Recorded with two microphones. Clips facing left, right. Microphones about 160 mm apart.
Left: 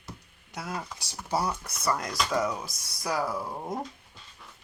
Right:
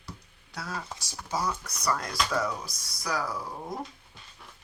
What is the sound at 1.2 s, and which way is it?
Speech, 30° left (ahead or behind).